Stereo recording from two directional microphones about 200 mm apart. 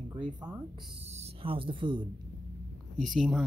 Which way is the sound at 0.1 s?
20° right (ahead or behind).